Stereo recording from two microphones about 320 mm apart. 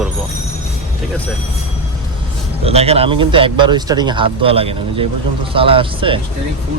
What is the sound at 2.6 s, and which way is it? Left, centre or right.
Speech, centre.